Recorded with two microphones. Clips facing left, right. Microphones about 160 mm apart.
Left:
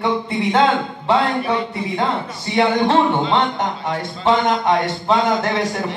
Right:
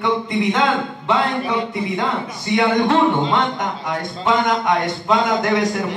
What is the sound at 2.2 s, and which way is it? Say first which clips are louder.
A man's voice: even; 30° left (ahead or behind).